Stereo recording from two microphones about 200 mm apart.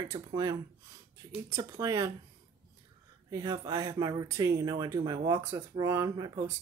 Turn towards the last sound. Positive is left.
turn(degrees=-15)  # may be behind; listen again after turning